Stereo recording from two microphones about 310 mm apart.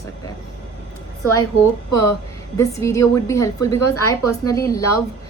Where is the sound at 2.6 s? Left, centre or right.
Centre.